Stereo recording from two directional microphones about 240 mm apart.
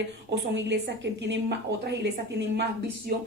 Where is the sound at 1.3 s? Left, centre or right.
Right.